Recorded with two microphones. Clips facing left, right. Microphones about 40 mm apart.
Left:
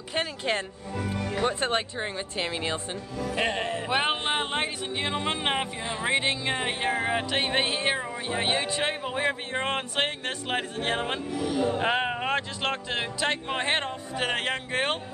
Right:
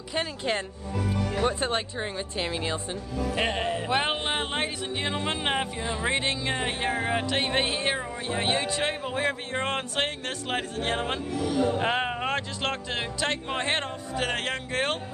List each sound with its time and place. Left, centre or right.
0.1 s music: centre
1.1 s music: left
1.4 s music: centre